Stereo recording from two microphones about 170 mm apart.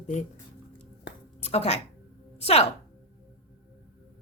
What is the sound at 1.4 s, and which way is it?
Speech, 40° left (ahead or behind).